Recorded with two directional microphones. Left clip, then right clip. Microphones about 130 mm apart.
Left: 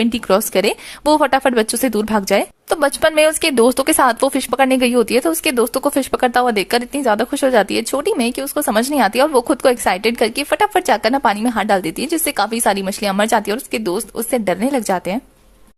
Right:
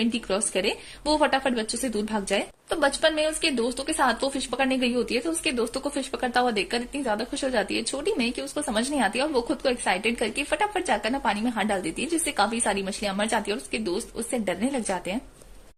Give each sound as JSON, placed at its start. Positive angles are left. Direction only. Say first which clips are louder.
{"t": 0.0, "sound": "speech", "louder": "left 11 dB", "side_deg": 35}
{"t": 2.6, "sound": "a woman's voice", "louder": "left 6 dB", "side_deg": 55}
{"t": 3.9, "sound": "speech", "louder": "left 10 dB", "side_deg": 45}